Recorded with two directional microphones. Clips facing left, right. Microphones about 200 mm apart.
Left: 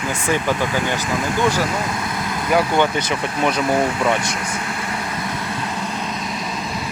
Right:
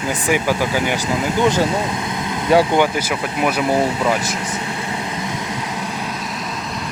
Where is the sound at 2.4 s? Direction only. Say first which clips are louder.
Right 4 dB; 25° right (ahead or behind).